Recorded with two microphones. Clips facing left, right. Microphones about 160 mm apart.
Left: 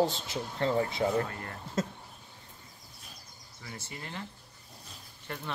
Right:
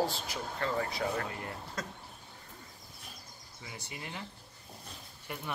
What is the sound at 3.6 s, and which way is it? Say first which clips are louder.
Speech: left 1 dB; 15° right (ahead or behind).